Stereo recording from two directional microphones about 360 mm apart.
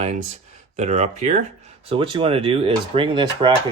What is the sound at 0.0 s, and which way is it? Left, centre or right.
Speech, centre.